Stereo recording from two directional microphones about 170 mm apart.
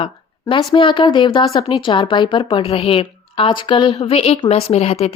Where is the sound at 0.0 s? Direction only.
30° left (ahead or behind).